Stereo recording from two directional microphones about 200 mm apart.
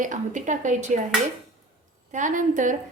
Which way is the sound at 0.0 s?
40° right (ahead or behind).